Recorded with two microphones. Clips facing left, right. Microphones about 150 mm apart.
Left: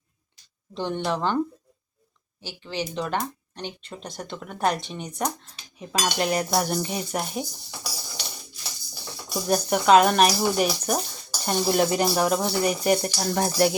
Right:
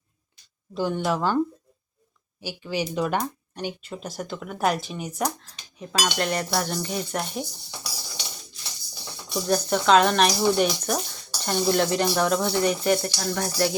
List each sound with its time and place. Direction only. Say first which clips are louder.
0.7 s speech: right 2 dB; 5° right (ahead or behind)
2.4 s speech: right 3 dB; 10° right (ahead or behind)
5.8 s speech: even; 10° left (ahead or behind)
9.3 s speech: even; 10° left (ahead or behind)
13.1 s speech: left 3 dB; 25° left (ahead or behind)